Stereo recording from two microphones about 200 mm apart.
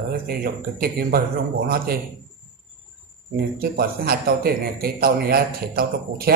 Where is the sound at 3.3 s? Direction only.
50° right (ahead or behind).